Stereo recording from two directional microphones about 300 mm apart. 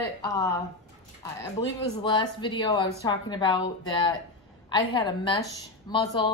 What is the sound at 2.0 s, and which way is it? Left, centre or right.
Speech, centre.